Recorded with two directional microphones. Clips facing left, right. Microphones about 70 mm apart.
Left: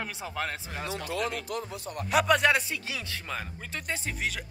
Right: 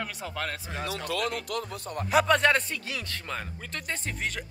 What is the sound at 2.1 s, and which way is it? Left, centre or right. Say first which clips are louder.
Speech: right 1 dB; centre.